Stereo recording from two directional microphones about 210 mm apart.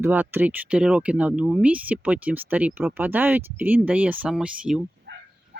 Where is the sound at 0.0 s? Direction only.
10° right (ahead or behind).